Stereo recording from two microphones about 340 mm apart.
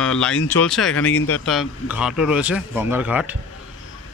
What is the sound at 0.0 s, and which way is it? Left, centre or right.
Speech, centre.